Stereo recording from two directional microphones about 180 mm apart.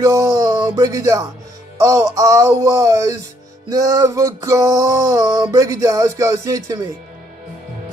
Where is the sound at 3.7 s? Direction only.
15° right (ahead or behind).